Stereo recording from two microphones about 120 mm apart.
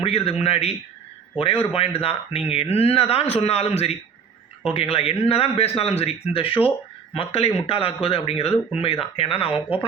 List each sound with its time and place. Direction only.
0.0 s speech: 55° left (ahead or behind)
1.7 s speech: 55° left (ahead or behind)